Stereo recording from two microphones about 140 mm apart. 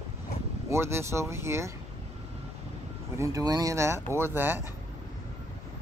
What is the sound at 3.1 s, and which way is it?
Speech, 25° right (ahead or behind).